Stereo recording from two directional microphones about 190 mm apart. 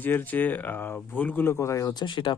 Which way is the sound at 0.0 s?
10° left (ahead or behind).